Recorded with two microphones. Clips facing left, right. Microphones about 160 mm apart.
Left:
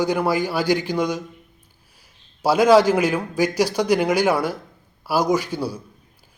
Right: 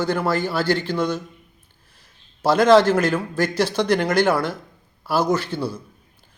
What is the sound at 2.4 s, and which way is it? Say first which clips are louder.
Speech: even; 10° left (ahead or behind).